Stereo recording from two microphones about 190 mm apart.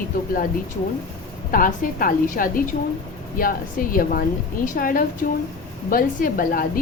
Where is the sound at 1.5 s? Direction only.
45° left (ahead or behind).